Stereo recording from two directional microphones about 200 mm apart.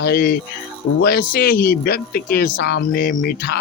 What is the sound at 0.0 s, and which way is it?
Speech, 50° left (ahead or behind).